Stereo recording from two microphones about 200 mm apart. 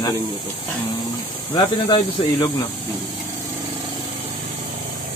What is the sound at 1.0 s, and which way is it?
Speech, 20° left (ahead or behind).